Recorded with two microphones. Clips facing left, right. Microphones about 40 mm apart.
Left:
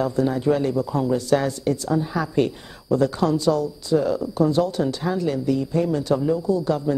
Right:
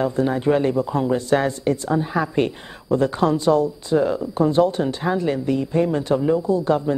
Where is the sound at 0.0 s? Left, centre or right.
Right.